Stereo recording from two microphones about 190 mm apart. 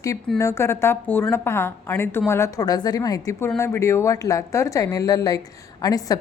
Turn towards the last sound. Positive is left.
turn(degrees=20)  # may be behind; listen again after turning